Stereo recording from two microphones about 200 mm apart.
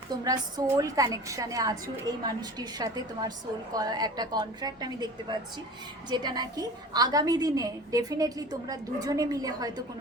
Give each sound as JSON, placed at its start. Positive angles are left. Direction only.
{"t": 0.1, "sound": "a woman's voice", "side_deg": -20}
{"t": 6.1, "sound": "a woman's voice", "side_deg": -20}